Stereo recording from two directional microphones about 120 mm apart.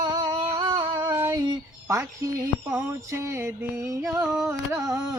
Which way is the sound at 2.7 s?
25° right (ahead or behind).